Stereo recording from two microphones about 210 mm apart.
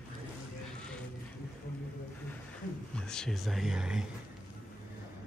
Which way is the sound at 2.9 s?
5° left (ahead or behind).